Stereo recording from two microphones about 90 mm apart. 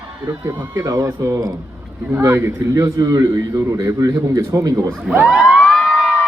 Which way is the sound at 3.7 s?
40° right (ahead or behind).